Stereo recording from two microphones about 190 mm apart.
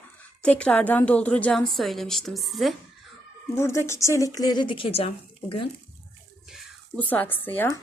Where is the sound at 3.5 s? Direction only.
15° left (ahead or behind); by 5.6 s 30° left (ahead or behind).